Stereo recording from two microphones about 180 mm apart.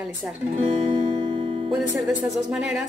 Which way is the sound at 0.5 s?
35° right (ahead or behind).